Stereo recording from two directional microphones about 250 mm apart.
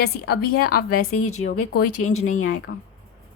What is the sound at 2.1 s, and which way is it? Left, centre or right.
Speech, left.